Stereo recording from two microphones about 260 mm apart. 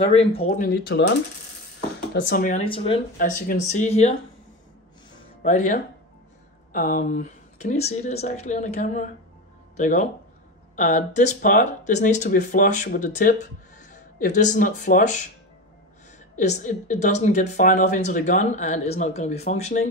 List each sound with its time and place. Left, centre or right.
0.0 s speech: left
5.4 s speech: left
16.3 s speech: left